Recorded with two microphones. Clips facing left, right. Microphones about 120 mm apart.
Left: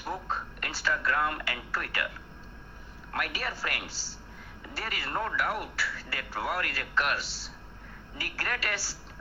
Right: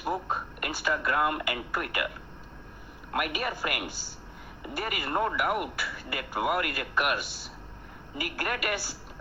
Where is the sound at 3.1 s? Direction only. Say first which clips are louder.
Right 4 dB; 15° right (ahead or behind).